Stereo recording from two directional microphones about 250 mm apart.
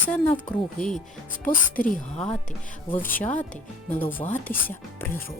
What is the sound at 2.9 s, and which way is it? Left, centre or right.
Speech, centre.